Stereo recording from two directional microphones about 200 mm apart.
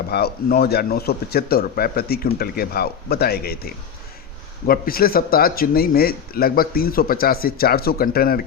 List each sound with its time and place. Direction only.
0.1 s speech: 50° left (ahead or behind)
4.6 s speech: 45° left (ahead or behind)